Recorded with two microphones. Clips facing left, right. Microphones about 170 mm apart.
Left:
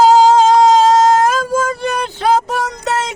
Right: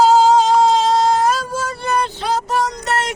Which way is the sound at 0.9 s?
45° left (ahead or behind).